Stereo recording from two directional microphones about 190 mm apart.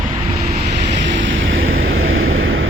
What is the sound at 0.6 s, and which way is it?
Vehicle, 65° right (ahead or behind).